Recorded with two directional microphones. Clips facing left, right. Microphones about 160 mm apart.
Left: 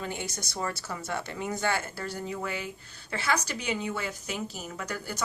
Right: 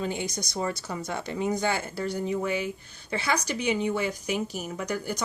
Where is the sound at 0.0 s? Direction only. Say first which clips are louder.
Right 5 dB; 15° right (ahead or behind).